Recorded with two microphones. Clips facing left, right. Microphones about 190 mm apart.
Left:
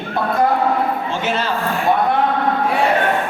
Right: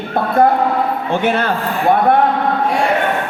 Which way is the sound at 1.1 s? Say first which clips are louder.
Right 5 dB; 55° right (ahead or behind).